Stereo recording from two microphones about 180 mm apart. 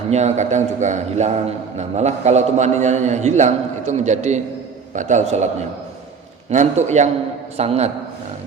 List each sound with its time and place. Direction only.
0.1 s a man's voice: 40° right (ahead or behind)
6.5 s a man's voice: 40° right (ahead or behind)